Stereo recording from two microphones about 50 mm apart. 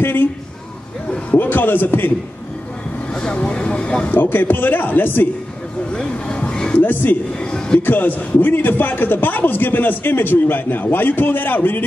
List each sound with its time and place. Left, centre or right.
0.0 s a man's voice: left
1.3 s a man's voice: left
3.5 s speech: left
4.1 s speech: left
5.9 s vehicle: left
6.7 s speech: left
7.3 s a sound: centre
7.8 s speech: left